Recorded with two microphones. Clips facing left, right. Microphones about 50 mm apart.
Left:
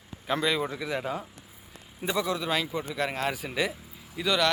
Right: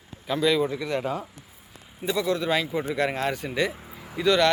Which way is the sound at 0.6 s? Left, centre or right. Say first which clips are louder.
Right 4 dB; centre.